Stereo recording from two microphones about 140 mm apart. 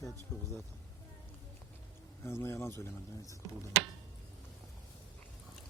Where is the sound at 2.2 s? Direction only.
20° left (ahead or behind).